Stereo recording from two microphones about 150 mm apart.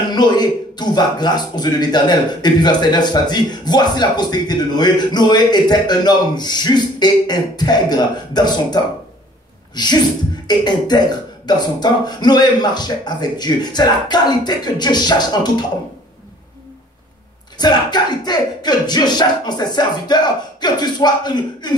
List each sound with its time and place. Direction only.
0.1 s speech: 30° left (ahead or behind)
17.6 s speech: 30° left (ahead or behind)